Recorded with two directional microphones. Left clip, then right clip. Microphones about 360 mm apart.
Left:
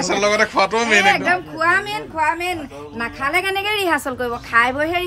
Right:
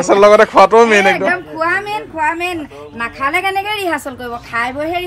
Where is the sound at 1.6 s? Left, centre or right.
Centre.